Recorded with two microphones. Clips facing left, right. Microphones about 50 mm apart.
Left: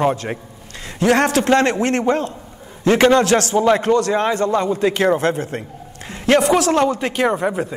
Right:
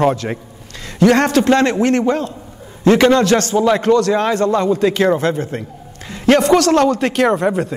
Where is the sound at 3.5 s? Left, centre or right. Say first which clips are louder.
Right 1 dB; centre.